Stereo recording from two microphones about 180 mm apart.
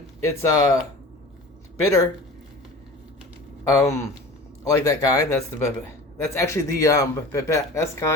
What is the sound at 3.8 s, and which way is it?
Speech, 15° left (ahead or behind).